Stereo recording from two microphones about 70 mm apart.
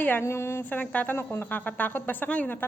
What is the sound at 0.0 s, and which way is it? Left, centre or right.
Speech, left.